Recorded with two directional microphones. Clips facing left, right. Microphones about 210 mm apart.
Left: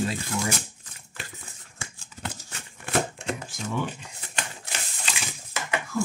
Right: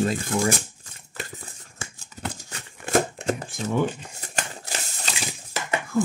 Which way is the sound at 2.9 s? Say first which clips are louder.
Right 5 dB; 40° right (ahead or behind).